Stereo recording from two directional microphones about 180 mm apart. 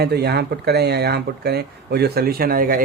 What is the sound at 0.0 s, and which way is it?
Speech, 60° right (ahead or behind).